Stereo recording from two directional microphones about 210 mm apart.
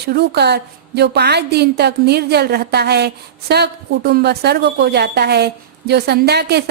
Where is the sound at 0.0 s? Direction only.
50° right (ahead or behind).